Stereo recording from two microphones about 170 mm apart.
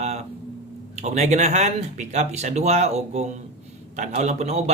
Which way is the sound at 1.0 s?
40° right (ahead or behind).